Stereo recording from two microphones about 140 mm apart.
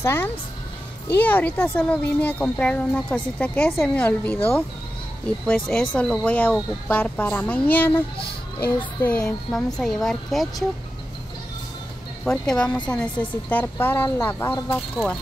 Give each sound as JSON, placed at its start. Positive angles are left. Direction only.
{"t": 0.0, "sound": "speech", "side_deg": 15}
{"t": 5.5, "sound": "a woman's voice", "side_deg": 5}
{"t": 12.3, "sound": "speech", "side_deg": 5}